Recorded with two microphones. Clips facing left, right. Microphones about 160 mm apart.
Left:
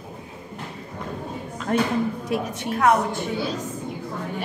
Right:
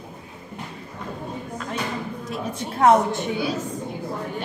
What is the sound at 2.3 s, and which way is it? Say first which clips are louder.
Speech: left 6 dB; 65° left (ahead or behind).